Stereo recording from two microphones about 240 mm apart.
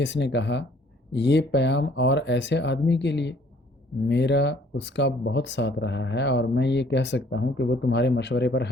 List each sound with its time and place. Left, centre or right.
0.0 s speech: left